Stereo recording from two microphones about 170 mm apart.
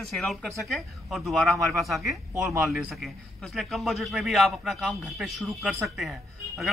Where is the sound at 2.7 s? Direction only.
Centre (ahead or behind).